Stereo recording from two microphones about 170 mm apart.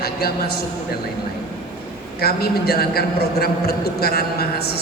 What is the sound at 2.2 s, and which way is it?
A woman's voice, 65° left (ahead or behind).